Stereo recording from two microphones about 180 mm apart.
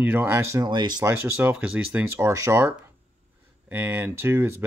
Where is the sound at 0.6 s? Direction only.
25° right (ahead or behind).